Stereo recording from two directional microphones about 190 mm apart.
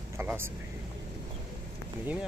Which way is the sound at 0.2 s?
10° right (ahead or behind).